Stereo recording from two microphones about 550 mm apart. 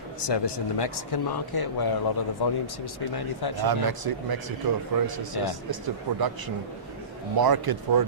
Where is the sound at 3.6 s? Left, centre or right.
Right.